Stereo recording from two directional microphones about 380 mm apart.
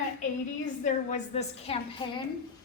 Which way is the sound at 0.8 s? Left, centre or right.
Centre.